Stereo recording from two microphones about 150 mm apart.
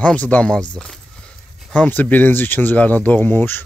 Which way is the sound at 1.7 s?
10° left (ahead or behind).